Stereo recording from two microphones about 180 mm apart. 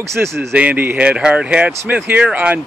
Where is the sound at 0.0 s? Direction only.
15° right (ahead or behind).